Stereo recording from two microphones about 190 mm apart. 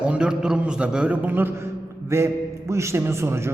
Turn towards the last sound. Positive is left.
turn(degrees=-15)  # may be behind; listen again after turning